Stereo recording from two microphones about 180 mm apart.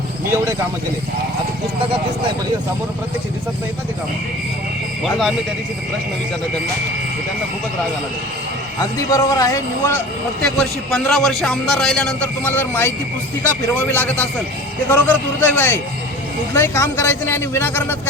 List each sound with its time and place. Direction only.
0.3 s speech: 15° right (ahead or behind)
8.8 s speech: 20° left (ahead or behind)
10.4 s a man's voice: 5° left (ahead or behind)